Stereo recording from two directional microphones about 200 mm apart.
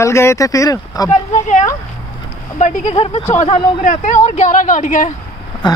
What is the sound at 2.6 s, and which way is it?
Speech, 35° left (ahead or behind).